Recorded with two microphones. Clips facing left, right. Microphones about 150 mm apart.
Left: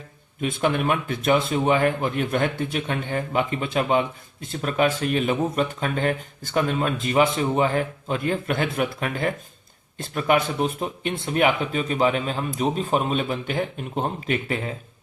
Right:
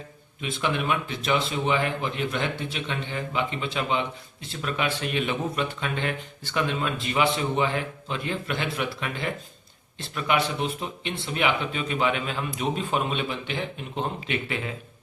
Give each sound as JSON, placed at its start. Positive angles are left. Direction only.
{"t": 0.4, "sound": "a man's voice", "side_deg": 50}